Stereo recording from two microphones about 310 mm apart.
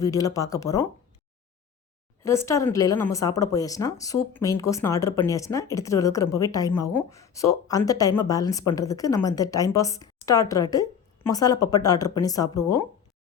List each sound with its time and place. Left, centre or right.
0.0 s a woman's voice: centre
2.2 s a woman's voice: centre